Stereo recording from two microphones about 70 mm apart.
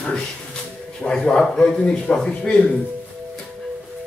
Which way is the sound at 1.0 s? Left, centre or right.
Centre.